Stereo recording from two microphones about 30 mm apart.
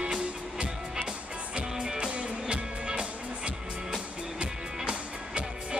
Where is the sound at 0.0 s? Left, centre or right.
Right.